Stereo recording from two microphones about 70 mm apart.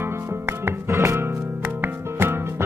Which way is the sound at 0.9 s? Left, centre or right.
Right.